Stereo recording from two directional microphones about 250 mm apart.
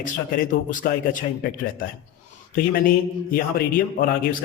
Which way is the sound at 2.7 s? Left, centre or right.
Left.